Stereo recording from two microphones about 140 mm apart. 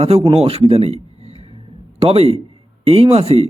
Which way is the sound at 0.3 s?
45° right (ahead or behind).